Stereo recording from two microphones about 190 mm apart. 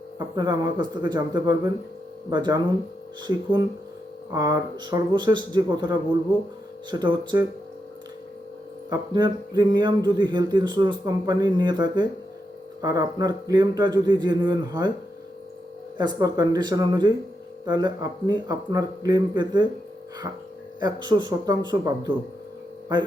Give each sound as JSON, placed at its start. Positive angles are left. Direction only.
{"t": 0.2, "sound": "speech", "side_deg": -20}
{"t": 4.3, "sound": "speech", "side_deg": -20}
{"t": 8.9, "sound": "speech", "side_deg": -20}
{"t": 16.0, "sound": "speech", "side_deg": -20}
{"t": 20.8, "sound": "speech", "side_deg": -20}